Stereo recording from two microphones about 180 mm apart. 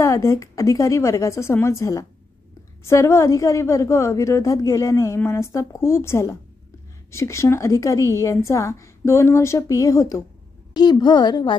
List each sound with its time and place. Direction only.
0.0 s a woman's voice: 15° left (ahead or behind)